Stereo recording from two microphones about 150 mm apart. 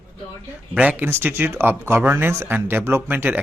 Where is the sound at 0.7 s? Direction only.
10° right (ahead or behind).